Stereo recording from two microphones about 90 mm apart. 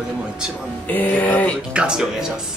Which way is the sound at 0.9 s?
20° left (ahead or behind).